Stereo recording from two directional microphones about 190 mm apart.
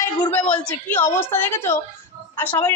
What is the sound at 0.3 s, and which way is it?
A woman's voice, 5° left (ahead or behind).